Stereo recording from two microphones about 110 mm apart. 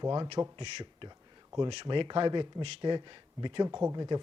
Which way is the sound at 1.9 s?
45° right (ahead or behind).